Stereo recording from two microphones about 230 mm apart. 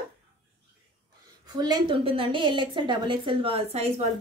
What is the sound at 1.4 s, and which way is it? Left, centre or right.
A woman's voice, centre.